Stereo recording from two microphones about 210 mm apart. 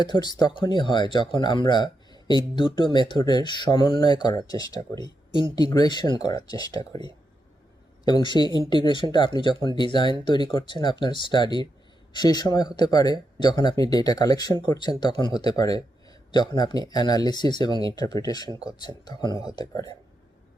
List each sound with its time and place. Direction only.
0.0 s speech: 20° left (ahead or behind)
6.6 s speech: 20° right (ahead or behind)
8.0 s speech: 20° left (ahead or behind)